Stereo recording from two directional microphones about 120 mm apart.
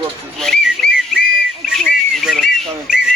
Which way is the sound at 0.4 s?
5° left (ahead or behind).